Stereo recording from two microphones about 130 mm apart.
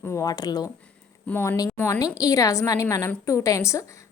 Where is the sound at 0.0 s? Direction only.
25° left (ahead or behind).